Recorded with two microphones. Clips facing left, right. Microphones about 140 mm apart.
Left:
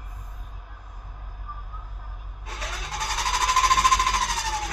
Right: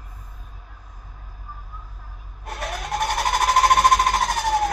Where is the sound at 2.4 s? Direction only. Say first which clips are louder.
Right 7 dB; 65° right (ahead or behind).